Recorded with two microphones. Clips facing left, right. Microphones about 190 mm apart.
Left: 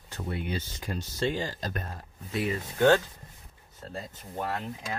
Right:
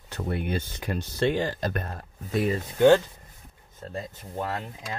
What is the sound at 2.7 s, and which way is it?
Speech, 15° right (ahead or behind).